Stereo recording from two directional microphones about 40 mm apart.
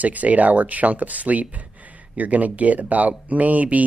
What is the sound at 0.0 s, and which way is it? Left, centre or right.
Speech, right.